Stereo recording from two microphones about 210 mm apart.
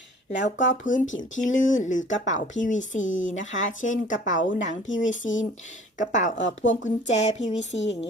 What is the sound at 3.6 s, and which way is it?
Speech, 65° left (ahead or behind).